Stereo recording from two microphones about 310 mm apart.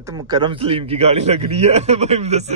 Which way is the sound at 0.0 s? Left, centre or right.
Centre.